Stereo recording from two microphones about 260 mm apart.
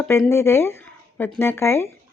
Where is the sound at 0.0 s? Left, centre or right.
Centre.